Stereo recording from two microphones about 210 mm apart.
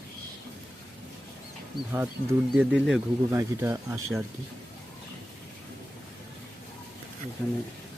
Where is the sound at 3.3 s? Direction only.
15° right (ahead or behind).